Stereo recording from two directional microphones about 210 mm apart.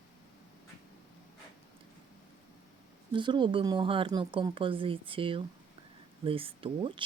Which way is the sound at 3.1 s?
25° right (ahead or behind).